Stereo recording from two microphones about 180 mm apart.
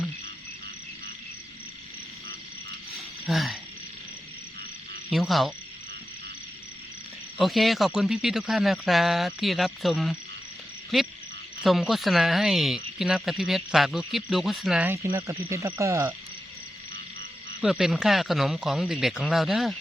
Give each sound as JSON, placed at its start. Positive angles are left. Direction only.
{"t": 3.2, "sound": "speech", "side_deg": 0}
{"t": 5.0, "sound": "speech", "side_deg": 0}
{"t": 7.3, "sound": "speech", "side_deg": 0}
{"t": 11.6, "sound": "speech", "side_deg": 0}
{"t": 15.1, "sound": "speech", "side_deg": -15}
{"t": 17.6, "sound": "speech", "side_deg": 0}